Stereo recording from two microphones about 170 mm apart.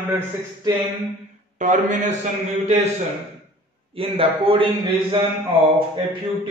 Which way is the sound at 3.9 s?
35° right (ahead or behind).